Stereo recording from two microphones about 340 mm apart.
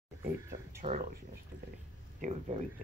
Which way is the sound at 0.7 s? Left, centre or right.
Right.